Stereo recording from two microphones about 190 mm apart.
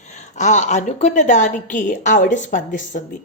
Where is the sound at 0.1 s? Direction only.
40° left (ahead or behind).